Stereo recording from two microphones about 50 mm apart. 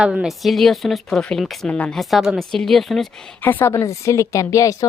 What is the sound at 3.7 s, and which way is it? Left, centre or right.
A woman's voice, left.